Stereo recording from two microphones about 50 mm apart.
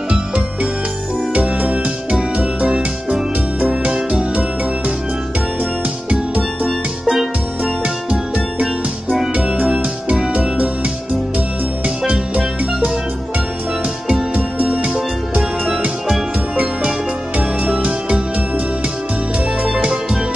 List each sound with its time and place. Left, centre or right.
1.6 s music: right
7.1 s music: centre
7.8 s music: right
9.8 s music: right
12.1 s music: right
14.3 s music: right